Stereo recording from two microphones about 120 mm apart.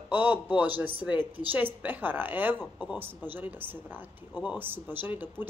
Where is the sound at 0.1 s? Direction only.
15° right (ahead or behind).